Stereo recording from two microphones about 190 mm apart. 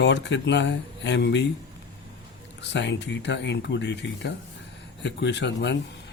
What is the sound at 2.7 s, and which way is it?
Speech, 65° left (ahead or behind).